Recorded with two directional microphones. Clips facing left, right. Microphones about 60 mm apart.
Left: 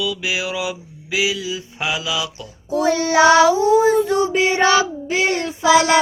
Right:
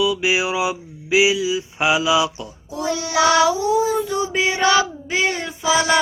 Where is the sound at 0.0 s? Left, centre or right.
Right.